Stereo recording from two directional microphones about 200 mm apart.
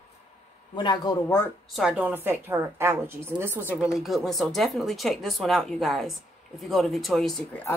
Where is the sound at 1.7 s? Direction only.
5° right (ahead or behind).